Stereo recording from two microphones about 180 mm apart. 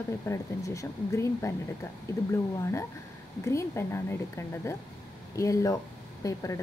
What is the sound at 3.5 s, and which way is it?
A woman's voice, 15° left (ahead or behind).